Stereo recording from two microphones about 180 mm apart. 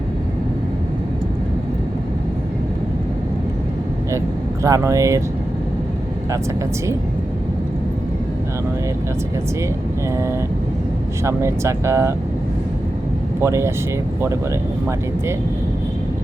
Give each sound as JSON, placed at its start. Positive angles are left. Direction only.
{"t": 4.6, "sound": "speech", "side_deg": -15}
{"t": 11.2, "sound": "speech", "side_deg": -15}
{"t": 13.4, "sound": "speech", "side_deg": -15}